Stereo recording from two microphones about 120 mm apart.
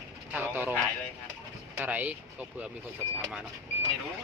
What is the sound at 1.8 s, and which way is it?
Speech, 15° right (ahead or behind).